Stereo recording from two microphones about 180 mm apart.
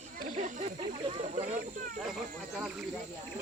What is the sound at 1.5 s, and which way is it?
Speech, 45° right (ahead or behind).